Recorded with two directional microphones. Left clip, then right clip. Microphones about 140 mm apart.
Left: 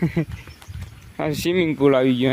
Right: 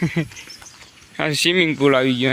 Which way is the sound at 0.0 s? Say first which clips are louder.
Right 1 dB; 15° left (ahead or behind).